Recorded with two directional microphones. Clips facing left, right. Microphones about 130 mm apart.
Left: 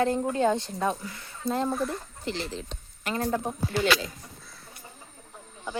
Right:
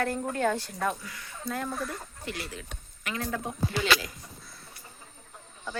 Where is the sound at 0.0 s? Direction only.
20° left (ahead or behind).